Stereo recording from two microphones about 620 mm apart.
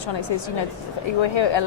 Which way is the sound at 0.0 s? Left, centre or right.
Left.